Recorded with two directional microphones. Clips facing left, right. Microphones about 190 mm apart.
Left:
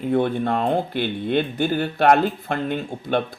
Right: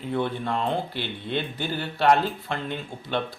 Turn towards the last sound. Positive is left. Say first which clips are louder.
# left 6 dB
turn(degrees=50)  # may be behind; listen again after turning